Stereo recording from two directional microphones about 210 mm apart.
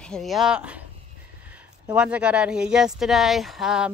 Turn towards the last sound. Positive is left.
turn(degrees=0)  # may be behind; listen again after turning